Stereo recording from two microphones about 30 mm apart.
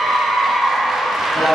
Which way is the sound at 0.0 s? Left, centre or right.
Centre.